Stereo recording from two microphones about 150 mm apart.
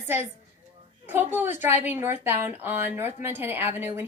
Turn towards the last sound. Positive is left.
turn(degrees=-15)  # may be behind; listen again after turning